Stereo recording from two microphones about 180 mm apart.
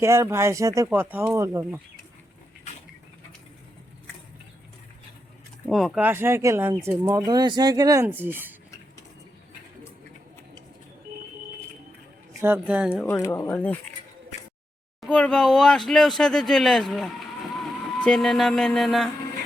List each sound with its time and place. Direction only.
0.0 s speech: 15° right (ahead or behind)
5.6 s speech: centre (ahead or behind)
12.4 s speech: 10° right (ahead or behind)
13.1 s speech: 15° left (ahead or behind)
15.0 s speech: 5° left (ahead or behind)